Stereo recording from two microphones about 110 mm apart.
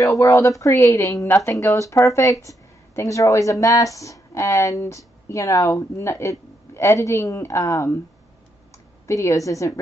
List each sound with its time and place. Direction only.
0.0 s speech: 30° left (ahead or behind)
9.0 s speech: 30° left (ahead or behind)